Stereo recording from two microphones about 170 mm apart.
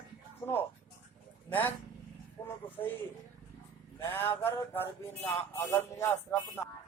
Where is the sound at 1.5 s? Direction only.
10° left (ahead or behind).